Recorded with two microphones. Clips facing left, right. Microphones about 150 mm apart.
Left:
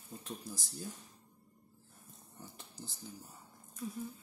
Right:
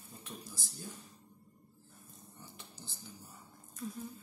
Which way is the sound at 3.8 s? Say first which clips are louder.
Even; 10° left (ahead or behind).